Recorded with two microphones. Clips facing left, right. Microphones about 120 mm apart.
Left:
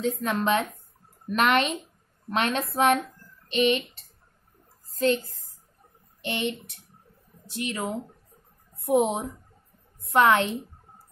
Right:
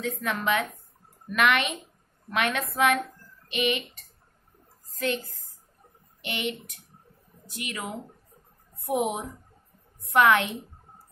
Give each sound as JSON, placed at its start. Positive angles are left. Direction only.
{"t": 0.0, "sound": "a woman's voice", "side_deg": 25}
{"t": 6.2, "sound": "a woman's voice", "side_deg": 25}